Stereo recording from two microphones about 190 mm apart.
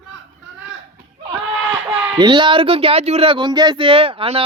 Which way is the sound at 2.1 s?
25° right (ahead or behind).